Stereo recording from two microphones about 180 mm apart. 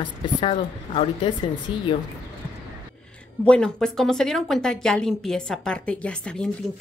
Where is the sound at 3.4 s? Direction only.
5° left (ahead or behind).